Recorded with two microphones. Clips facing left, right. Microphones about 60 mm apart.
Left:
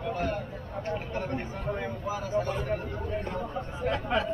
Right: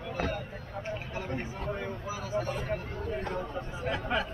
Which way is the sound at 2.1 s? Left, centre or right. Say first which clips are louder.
Left 4 dB; left.